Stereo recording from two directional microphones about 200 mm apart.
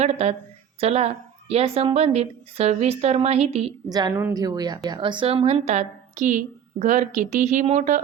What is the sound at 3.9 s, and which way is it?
A woman's voice, 20° right (ahead or behind).